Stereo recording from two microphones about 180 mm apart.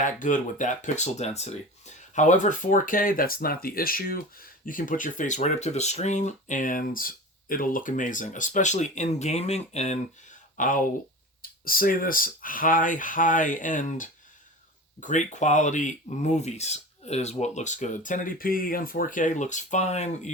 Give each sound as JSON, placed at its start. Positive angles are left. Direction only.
{"t": 0.0, "sound": "speech", "side_deg": 45}